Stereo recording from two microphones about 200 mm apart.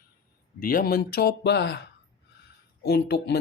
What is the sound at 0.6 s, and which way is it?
Speech, 45° left (ahead or behind).